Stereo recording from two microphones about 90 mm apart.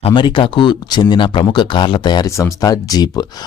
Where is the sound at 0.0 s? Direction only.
60° left (ahead or behind).